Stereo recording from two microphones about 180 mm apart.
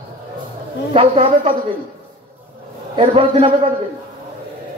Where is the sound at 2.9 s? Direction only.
30° right (ahead or behind).